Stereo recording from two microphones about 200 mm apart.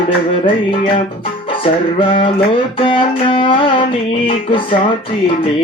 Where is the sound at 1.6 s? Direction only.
25° left (ahead or behind).